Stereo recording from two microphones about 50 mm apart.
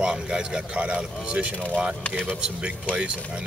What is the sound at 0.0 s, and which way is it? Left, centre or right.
Speech, centre.